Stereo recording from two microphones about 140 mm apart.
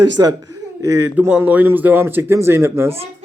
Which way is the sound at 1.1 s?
15° right (ahead or behind).